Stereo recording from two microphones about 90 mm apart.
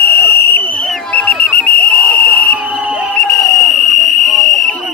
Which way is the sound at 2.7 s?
10° right (ahead or behind).